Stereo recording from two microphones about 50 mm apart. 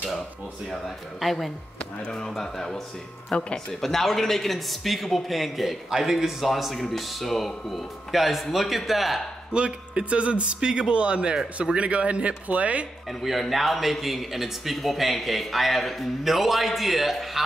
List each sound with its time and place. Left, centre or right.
0.7 s a man's voice: centre
2.0 s a man's voice: centre
9.5 s speech: right
13.2 s a man's voice: centre